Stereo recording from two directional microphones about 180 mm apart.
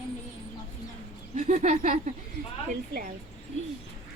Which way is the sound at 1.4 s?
40° right (ahead or behind).